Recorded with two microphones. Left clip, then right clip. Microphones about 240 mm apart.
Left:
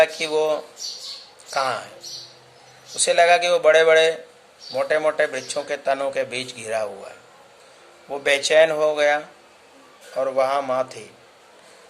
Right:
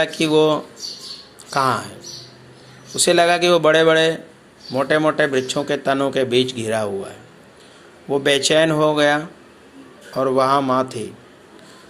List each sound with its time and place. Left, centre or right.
0.0 s a man's voice: centre
2.9 s a man's voice: centre
8.1 s a man's voice: centre